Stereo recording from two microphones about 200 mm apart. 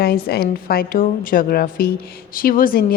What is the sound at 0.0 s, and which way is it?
A woman's voice, 50° left (ahead or behind).